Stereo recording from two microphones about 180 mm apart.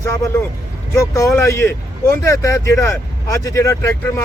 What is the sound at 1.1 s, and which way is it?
Speech, 15° left (ahead or behind).